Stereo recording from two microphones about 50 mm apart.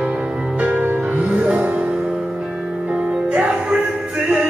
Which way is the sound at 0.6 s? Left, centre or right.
Right.